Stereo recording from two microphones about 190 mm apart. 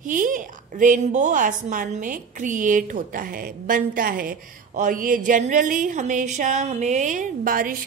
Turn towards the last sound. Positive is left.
turn(degrees=-45)  # may be behind; listen again after turning